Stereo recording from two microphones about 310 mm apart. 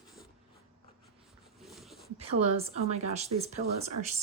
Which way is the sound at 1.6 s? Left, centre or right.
Centre.